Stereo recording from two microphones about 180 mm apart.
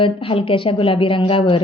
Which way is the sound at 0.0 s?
30° left (ahead or behind).